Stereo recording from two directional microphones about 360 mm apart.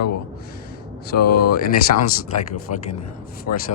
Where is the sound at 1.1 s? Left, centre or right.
Left.